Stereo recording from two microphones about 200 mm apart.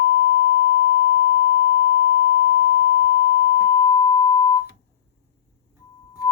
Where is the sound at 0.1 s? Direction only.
45° left (ahead or behind).